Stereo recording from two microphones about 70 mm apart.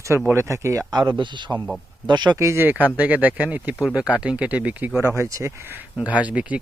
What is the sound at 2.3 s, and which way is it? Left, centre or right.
Speech, right.